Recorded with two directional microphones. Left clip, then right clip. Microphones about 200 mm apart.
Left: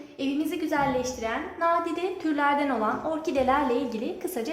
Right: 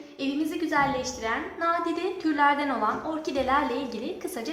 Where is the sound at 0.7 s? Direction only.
40° left (ahead or behind).